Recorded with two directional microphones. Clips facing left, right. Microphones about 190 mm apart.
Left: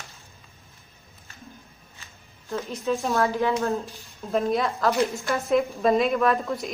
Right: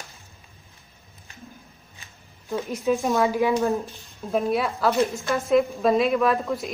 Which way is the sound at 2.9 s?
15° right (ahead or behind).